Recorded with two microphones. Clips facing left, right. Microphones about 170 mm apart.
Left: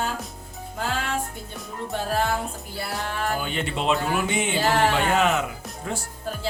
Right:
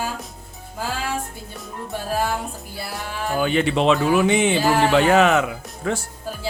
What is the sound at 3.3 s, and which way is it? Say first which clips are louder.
Speech: right 8 dB; 90° right.